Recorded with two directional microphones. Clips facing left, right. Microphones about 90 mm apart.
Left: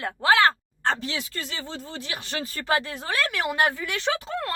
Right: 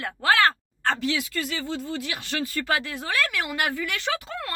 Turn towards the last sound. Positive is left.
turn(degrees=25)  # may be behind; listen again after turning